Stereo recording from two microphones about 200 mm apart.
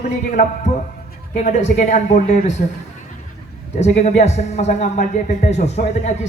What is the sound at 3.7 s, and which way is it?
A man's voice, 35° left (ahead or behind).